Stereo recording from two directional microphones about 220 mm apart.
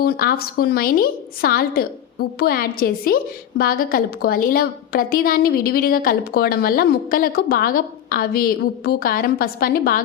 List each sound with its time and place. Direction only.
0.0 s a woman's voice: 45° left (ahead or behind)